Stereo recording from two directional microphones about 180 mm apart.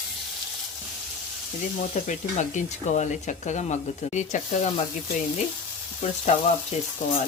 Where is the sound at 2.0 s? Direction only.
40° left (ahead or behind).